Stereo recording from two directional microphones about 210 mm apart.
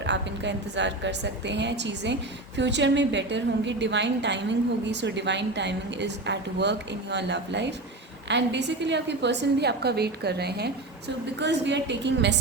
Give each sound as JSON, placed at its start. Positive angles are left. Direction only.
{"t": 0.0, "sound": "a woman's voice", "side_deg": -55}